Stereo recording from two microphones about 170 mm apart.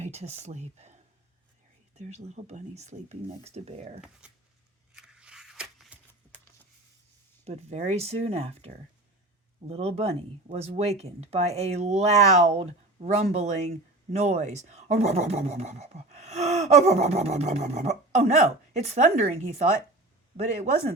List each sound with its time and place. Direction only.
0.0 s speech: 40° right (ahead or behind)
2.0 s speech: 40° right (ahead or behind)
4.9 s a sound: 5° right (ahead or behind)
7.4 s speech: 40° right (ahead or behind)